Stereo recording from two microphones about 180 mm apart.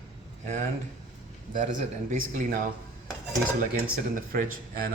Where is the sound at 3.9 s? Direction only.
45° right (ahead or behind).